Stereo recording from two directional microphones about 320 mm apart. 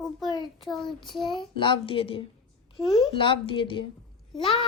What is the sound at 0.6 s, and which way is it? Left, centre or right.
Child singing, centre.